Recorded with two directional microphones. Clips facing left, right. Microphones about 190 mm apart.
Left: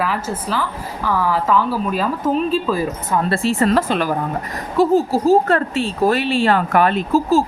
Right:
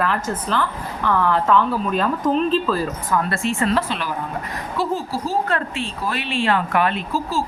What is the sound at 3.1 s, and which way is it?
Speech, 30° left (ahead or behind).